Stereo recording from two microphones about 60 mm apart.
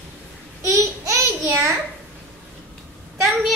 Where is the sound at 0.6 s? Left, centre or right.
Right.